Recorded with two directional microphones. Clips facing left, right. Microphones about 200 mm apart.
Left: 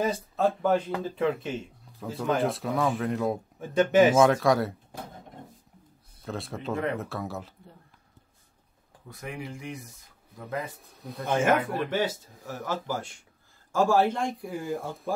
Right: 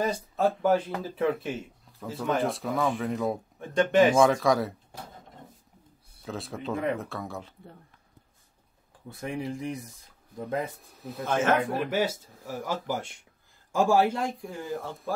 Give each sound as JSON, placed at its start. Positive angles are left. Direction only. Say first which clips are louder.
{"t": 0.0, "sound": "speech", "louder": "even", "side_deg": -5}
{"t": 6.2, "sound": "speech", "louder": "even", "side_deg": 0}
{"t": 9.1, "sound": "speech", "louder": "right 5 dB", "side_deg": -30}
{"t": 11.0, "sound": "speech", "louder": "right 1 dB", "side_deg": -5}
{"t": 11.2, "sound": "speech", "louder": "left 1 dB", "side_deg": 15}
{"t": 11.9, "sound": "speech", "louder": "right 1 dB", "side_deg": -10}
{"t": 14.4, "sound": "speech", "louder": "left 2 dB", "side_deg": 10}